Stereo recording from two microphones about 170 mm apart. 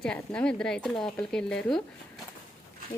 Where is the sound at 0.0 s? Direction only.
5° left (ahead or behind).